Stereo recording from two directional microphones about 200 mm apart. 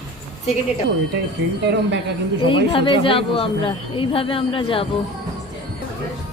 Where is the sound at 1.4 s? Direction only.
60° right (ahead or behind).